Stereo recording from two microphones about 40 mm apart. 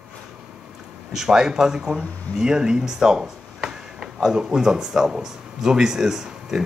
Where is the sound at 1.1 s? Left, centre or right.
Centre.